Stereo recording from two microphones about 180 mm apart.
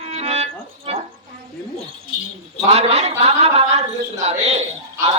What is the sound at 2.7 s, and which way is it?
A woman's voice, 35° right (ahead or behind).